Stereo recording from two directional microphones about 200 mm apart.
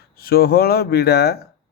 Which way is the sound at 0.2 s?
50° left (ahead or behind).